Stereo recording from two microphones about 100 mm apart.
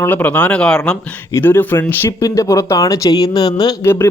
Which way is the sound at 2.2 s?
30° left (ahead or behind).